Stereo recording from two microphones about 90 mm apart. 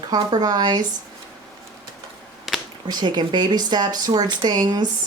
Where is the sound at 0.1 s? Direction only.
50° right (ahead or behind).